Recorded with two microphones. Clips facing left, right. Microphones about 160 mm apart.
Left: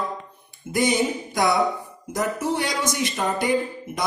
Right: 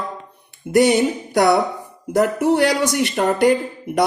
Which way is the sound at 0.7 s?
65° right (ahead or behind).